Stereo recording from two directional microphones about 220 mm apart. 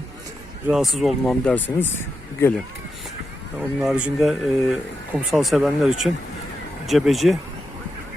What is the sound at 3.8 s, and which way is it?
Speech, 5° right (ahead or behind).